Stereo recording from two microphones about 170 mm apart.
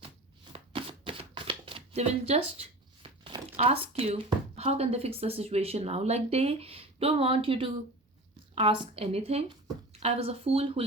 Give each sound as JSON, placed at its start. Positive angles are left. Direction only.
{"t": 0.5, "sound": "speech", "side_deg": -30}